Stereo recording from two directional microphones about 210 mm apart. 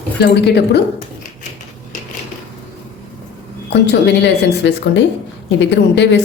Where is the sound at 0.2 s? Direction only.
55° left (ahead or behind).